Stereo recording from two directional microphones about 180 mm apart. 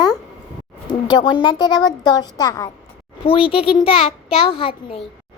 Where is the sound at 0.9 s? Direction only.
25° left (ahead or behind).